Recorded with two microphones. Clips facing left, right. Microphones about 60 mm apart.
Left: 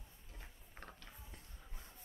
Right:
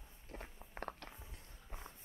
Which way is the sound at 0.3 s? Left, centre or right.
Right.